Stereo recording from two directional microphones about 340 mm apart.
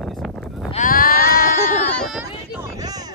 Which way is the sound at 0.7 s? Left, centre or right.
Left.